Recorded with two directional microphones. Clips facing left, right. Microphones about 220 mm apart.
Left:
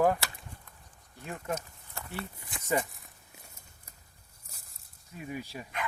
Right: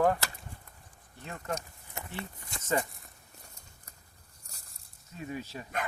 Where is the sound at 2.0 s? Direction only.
20° right (ahead or behind).